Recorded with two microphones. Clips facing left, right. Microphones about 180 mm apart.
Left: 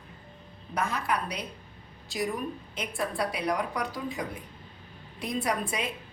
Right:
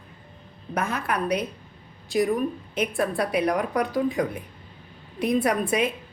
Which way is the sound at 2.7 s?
60° right (ahead or behind).